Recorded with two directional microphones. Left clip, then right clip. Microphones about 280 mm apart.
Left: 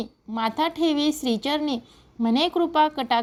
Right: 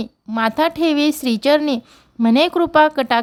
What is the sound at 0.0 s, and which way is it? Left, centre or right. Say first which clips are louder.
A woman's voice: right 7 dB; right.